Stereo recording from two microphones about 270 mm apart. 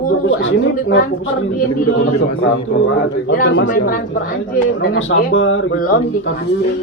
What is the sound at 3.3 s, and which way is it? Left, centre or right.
Speech, left.